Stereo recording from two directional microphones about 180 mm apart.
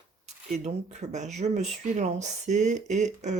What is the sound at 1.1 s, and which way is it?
Speech, 40° right (ahead or behind).